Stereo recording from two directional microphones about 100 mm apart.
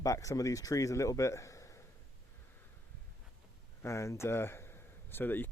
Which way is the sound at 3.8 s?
30° left (ahead or behind).